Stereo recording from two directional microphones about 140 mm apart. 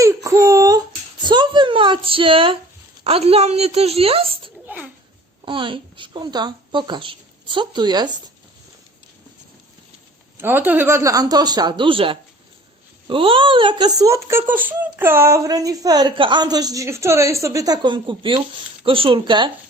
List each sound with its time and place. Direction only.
0.0 s a sound: 20° right (ahead or behind)
1.2 s speech: 35° right (ahead or behind)
4.6 s a child's voice: 10° right (ahead or behind)
5.5 s speech: 35° right (ahead or behind)
10.3 s speech: 15° right (ahead or behind); by 19.5 s 35° right (ahead or behind)